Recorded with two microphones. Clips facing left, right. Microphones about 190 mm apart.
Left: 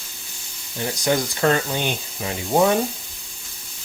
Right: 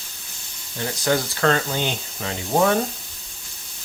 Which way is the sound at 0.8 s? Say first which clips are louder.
Left 1 dB; 15° left (ahead or behind).